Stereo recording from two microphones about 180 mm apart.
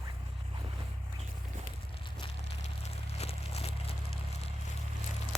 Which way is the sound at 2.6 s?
35° left (ahead or behind).